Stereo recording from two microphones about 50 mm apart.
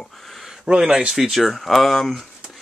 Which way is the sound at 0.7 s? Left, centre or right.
Centre.